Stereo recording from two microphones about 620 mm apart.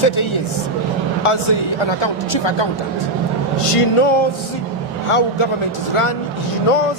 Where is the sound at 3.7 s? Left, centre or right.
Left.